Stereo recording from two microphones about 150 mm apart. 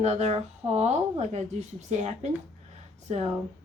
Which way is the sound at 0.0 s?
45° right (ahead or behind).